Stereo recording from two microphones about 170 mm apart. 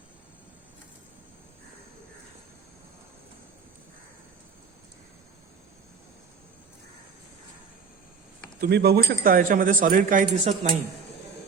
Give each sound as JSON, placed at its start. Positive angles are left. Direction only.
{"t": 8.6, "sound": "speech", "side_deg": -65}